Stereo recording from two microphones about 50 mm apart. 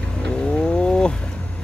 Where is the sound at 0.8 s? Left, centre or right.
Centre.